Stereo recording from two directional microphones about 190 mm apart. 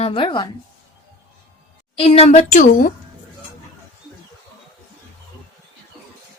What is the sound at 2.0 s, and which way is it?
Speech, 30° left (ahead or behind).